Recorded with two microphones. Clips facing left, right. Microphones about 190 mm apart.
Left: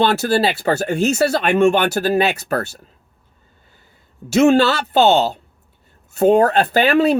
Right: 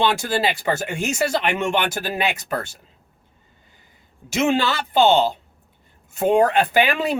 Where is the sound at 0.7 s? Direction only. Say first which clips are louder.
Left 6 dB; 55° left (ahead or behind).